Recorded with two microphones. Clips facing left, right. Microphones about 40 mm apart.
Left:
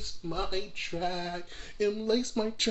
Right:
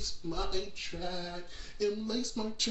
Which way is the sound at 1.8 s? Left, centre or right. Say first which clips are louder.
Left 5 dB; left.